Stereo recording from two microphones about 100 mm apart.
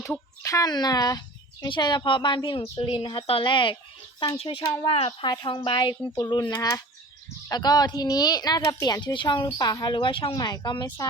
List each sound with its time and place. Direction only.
0.4 s a woman's voice: 35° left (ahead or behind); by 5.1 s 70° left (ahead or behind)
5.2 s a woman's voice: 45° left (ahead or behind)
10.4 s a woman's voice: 40° left (ahead or behind)